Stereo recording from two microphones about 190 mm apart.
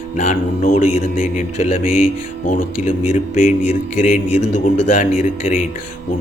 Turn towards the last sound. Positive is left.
turn(degrees=45)  # may be behind; listen again after turning